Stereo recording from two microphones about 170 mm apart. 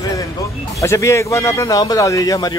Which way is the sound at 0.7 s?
20° left (ahead or behind).